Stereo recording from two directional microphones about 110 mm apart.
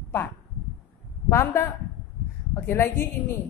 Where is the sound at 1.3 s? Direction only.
25° left (ahead or behind).